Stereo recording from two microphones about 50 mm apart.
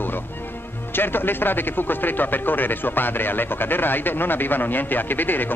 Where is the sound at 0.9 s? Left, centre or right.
Left.